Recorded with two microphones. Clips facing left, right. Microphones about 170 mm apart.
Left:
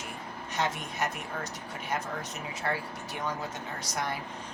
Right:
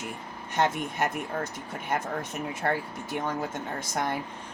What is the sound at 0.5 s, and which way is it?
Speech, 50° right (ahead or behind).